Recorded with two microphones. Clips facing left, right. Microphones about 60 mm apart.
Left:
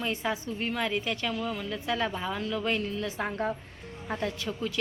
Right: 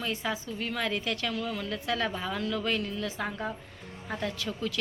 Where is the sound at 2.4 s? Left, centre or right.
Left.